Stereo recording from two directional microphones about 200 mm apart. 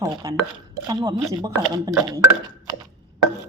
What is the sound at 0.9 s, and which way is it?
Speech, 20° right (ahead or behind).